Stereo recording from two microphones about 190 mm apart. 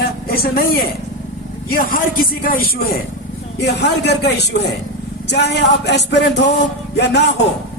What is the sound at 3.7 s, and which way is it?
Speech, 60° left (ahead or behind).